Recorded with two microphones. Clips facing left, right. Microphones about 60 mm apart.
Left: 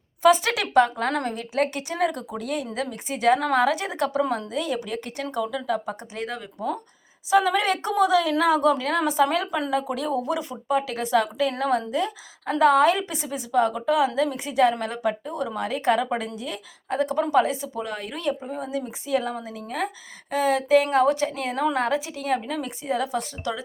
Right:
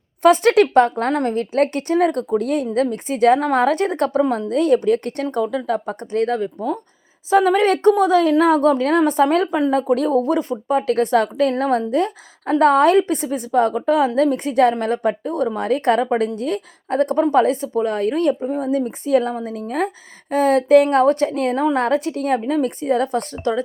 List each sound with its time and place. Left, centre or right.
0.2 s a woman's voice: right
1.1 s a woman's voice: right
1.4 s a woman's voice: right
3.3 s a woman's voice: right
3.6 s a woman's voice: right
4.2 s a woman's voice: centre
4.5 s a woman's voice: right
5.2 s a woman's voice: right
11.5 s a woman's voice: right
18.4 s a woman's voice: right
22.4 s a woman's voice: right
22.8 s a woman's voice: right